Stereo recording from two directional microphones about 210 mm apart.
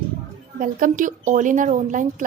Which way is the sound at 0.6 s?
40° right (ahead or behind).